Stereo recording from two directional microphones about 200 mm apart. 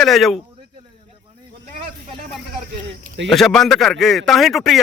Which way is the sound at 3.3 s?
Centre (ahead or behind).